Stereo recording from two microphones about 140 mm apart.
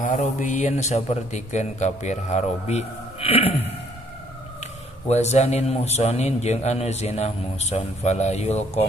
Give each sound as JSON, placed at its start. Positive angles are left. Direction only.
{"t": 0.0, "sound": "a man's voice", "side_deg": 65}
{"t": 5.0, "sound": "a man's voice", "side_deg": 50}